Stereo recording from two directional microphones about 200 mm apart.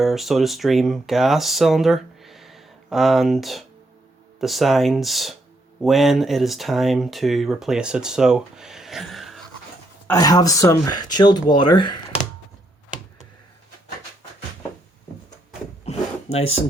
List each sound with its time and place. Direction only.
0.0 s speech: centre (ahead or behind)
10.1 s speech: 20° left (ahead or behind)